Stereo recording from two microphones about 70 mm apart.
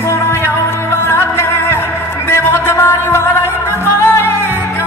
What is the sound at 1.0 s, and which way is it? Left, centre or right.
Music, left.